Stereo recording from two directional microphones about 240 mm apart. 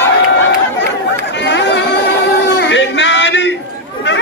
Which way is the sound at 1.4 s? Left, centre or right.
Left.